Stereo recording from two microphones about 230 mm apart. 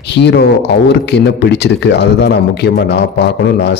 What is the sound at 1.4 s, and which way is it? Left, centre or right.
A man's voice, left.